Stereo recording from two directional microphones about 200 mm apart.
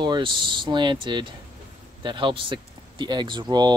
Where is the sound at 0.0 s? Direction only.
25° right (ahead or behind).